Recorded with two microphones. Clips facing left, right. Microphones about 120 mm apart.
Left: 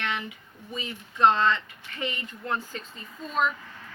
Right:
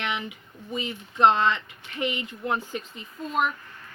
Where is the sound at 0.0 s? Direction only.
15° right (ahead or behind).